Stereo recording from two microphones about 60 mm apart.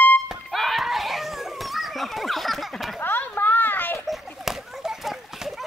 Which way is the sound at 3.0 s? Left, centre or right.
Left.